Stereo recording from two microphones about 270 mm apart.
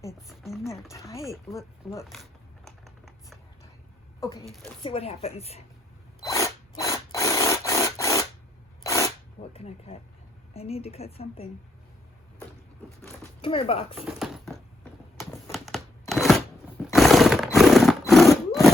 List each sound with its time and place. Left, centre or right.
0.2 s speech: centre
0.9 s speech: centre
2.6 s a sound: centre
4.2 s a woman's voice: centre
6.2 s a sound: centre
8.8 s sneeze: centre
9.4 s a woman's voice: left
13.4 s a woman's voice: centre
13.9 s speech: centre
15.5 s a sound: centre
16.8 s horse: centre